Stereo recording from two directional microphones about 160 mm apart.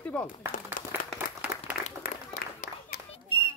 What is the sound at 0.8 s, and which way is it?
Applause, 60° left (ahead or behind).